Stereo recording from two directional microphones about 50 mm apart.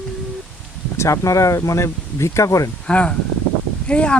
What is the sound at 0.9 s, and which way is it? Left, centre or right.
Speech, left.